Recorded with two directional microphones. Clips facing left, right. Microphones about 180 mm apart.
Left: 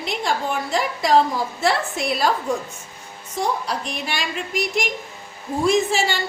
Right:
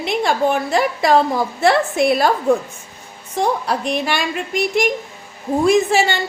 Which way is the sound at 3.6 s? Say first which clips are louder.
Right 7 dB; 60° right (ahead or behind).